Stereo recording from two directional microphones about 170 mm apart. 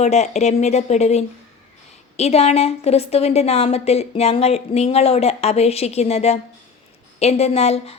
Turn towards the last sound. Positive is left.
turn(degrees=35)  # may be behind; listen again after turning